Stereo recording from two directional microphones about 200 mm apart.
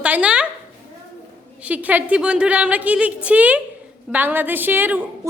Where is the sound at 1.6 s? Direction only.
10° right (ahead or behind).